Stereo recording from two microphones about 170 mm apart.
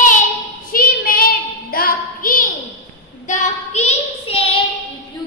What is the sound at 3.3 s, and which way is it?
Child singing, 45° left (ahead or behind).